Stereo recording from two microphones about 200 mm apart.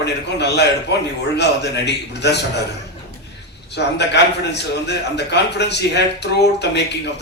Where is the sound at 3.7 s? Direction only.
60° left (ahead or behind).